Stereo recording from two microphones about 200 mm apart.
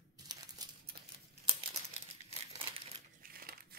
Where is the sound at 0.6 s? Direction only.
20° right (ahead or behind).